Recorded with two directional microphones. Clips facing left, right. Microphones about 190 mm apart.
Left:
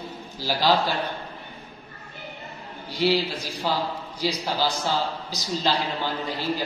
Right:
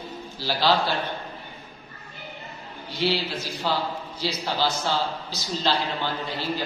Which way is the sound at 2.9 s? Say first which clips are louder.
Left 3 dB; 10° left (ahead or behind).